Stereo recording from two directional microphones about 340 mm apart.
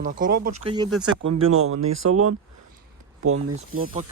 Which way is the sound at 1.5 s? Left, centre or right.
Right.